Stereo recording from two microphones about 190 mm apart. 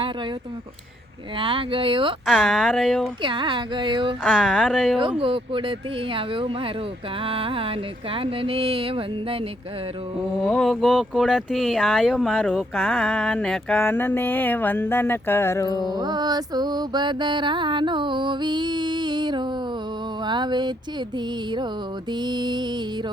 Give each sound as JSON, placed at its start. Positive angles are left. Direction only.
{"t": 1.4, "sound": "mantra", "side_deg": -25}
{"t": 2.2, "sound": "speech", "side_deg": 0}
{"t": 3.2, "sound": "mantra", "side_deg": -25}
{"t": 4.2, "sound": "speech", "side_deg": 0}
{"t": 5.2, "sound": "mantra", "side_deg": -30}
{"t": 10.5, "sound": "speech", "side_deg": 0}
{"t": 16.0, "sound": "mantra", "side_deg": -20}
{"t": 22.2, "sound": "mantra", "side_deg": -20}